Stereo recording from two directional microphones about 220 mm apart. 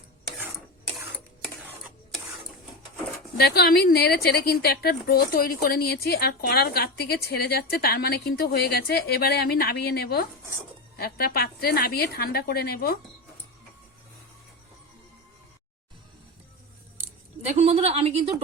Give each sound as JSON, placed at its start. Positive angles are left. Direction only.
{"t": 3.3, "sound": "a woman's voice", "side_deg": 45}
{"t": 17.0, "sound": "scissors", "side_deg": -30}